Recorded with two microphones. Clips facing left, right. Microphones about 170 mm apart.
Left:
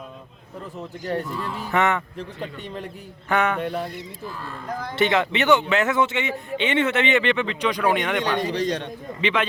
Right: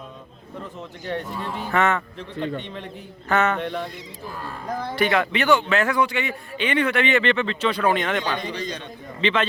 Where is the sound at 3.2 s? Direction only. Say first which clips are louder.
Right 1 dB; 15° left (ahead or behind).